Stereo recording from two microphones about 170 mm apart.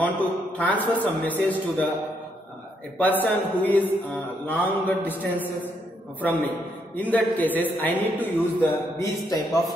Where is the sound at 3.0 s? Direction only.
10° left (ahead or behind).